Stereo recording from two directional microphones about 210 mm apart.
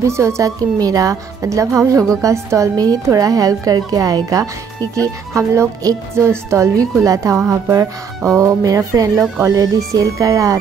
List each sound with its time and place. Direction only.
0.0 s a woman's voice: 15° right (ahead or behind)